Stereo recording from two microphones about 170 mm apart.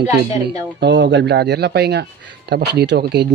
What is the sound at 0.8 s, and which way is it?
Speech, 90° right.